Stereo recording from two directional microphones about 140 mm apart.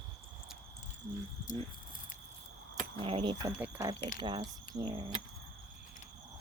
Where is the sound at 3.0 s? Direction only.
40° right (ahead or behind).